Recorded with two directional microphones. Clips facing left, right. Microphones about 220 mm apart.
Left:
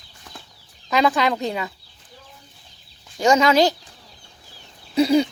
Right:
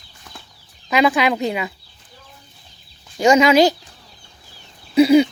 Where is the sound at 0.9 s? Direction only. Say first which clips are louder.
Right 3 dB; 5° right (ahead or behind).